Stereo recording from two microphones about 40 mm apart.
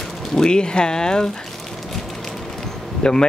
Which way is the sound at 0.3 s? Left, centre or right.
Centre.